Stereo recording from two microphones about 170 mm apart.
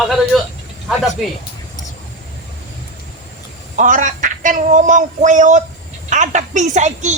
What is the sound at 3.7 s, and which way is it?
Speech, 50° right (ahead or behind).